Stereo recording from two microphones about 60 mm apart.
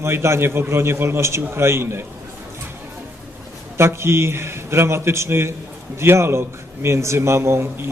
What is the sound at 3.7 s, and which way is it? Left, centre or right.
A man's voice, right.